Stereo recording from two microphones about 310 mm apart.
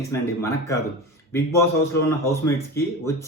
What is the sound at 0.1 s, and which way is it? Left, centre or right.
Speech, centre.